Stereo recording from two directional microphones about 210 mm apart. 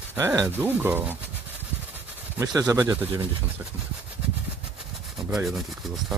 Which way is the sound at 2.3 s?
15° right (ahead or behind).